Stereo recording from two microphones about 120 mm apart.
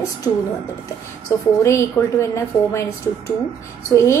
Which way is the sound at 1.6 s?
25° left (ahead or behind).